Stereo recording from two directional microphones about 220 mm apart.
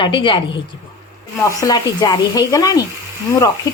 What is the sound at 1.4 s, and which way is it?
Speech, 15° left (ahead or behind).